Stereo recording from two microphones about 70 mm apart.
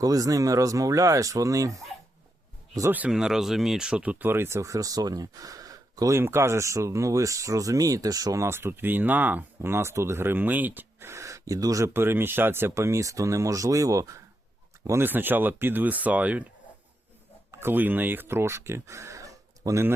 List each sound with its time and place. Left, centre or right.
0.0 s speech: right
3.1 s speech: centre
4.2 s speech: right
6.1 s speech: right
8.4 s speech: right
9.7 s speech: right
11.0 s speech: right
11.9 s speech: right
15.0 s speech: right
17.6 s speech: right